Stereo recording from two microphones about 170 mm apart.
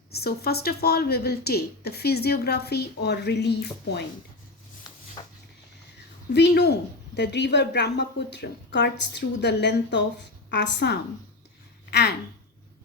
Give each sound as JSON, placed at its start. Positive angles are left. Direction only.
{"t": 0.1, "sound": "a woman's voice", "side_deg": 65}
{"t": 5.2, "sound": "a sound", "side_deg": 25}
{"t": 6.3, "sound": "a woman's voice", "side_deg": 80}
{"t": 7.2, "sound": "a woman's voice", "side_deg": 90}